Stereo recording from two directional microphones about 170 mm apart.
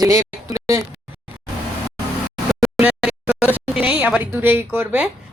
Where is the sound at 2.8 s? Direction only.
5° right (ahead or behind).